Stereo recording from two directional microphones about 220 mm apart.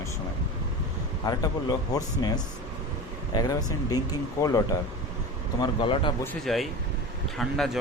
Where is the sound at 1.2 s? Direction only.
15° left (ahead or behind).